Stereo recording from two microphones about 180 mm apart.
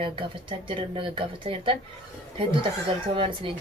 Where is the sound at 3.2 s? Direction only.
30° right (ahead or behind).